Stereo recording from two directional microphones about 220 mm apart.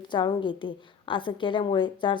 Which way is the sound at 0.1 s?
20° left (ahead or behind).